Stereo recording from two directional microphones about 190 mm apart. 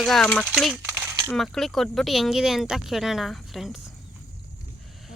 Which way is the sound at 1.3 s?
Centre (ahead or behind).